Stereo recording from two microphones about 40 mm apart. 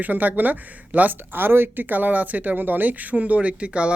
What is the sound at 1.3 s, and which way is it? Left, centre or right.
Speech, right.